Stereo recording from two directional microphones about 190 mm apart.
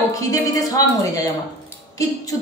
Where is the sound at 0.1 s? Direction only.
20° left (ahead or behind).